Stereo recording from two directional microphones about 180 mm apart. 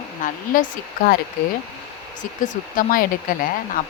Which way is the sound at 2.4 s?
50° left (ahead or behind).